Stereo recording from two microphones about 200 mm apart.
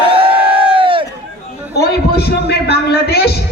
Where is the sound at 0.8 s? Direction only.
25° right (ahead or behind).